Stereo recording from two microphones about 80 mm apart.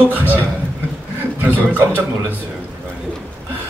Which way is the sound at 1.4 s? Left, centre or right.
Right.